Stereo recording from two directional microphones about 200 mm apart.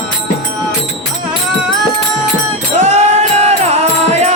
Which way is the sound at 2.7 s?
35° right (ahead or behind).